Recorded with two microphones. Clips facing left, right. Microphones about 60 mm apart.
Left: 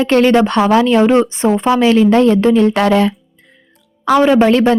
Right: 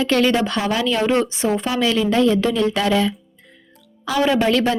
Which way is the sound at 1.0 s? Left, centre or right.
Left.